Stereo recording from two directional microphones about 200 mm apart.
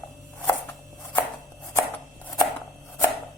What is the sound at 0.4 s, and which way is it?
Chopping, 10° left (ahead or behind).